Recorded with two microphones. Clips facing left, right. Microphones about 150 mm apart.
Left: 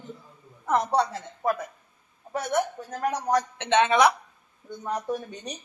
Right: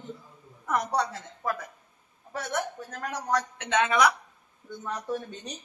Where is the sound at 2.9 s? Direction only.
20° left (ahead or behind).